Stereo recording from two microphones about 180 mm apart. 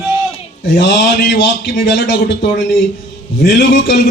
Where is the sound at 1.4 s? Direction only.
70° left (ahead or behind).